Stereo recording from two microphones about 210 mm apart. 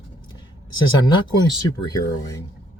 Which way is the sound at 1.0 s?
20° left (ahead or behind).